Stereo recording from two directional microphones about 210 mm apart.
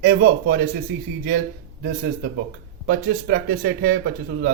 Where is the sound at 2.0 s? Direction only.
45° right (ahead or behind).